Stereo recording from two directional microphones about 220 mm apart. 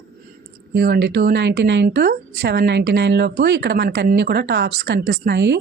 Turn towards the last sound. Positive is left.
turn(degrees=-50)  # may be behind; listen again after turning